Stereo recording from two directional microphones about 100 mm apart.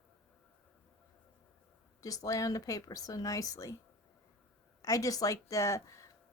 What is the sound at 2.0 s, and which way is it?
Speech, 35° left (ahead or behind).